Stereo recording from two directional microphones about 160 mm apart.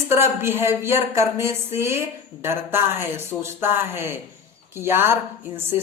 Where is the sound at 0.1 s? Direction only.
15° right (ahead or behind).